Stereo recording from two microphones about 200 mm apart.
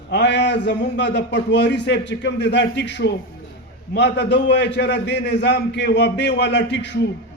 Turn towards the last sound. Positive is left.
turn(degrees=60)  # may be behind; listen again after turning